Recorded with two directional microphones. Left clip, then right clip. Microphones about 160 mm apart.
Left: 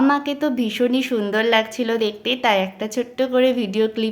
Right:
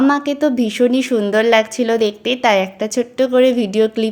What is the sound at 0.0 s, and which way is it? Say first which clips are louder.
A woman's voice: right 4 dB; 30° right (ahead or behind).